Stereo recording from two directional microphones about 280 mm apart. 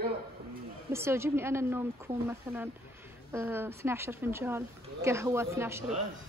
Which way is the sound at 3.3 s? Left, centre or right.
Centre.